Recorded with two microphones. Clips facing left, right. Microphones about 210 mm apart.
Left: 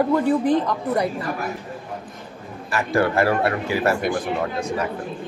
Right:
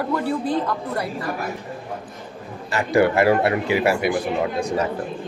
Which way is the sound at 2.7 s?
20° right (ahead or behind).